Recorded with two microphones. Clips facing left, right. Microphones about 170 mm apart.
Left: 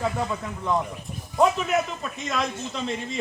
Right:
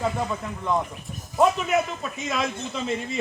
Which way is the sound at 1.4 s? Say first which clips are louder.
Right 1 dB; centre (ahead or behind).